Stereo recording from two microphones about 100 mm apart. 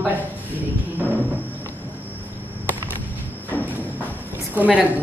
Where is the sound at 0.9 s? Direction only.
20° right (ahead or behind).